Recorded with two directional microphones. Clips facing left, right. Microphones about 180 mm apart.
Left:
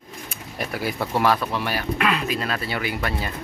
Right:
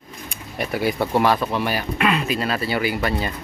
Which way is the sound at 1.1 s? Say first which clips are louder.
Right 1 dB; centre (ahead or behind).